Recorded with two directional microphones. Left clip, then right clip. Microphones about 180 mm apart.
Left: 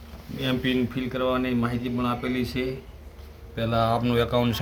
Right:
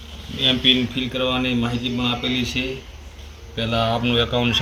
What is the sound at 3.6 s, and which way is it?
Speech, 5° left (ahead or behind).